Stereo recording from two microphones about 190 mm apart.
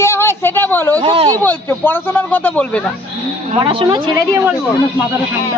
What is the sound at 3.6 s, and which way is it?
Speech, 25° right (ahead or behind).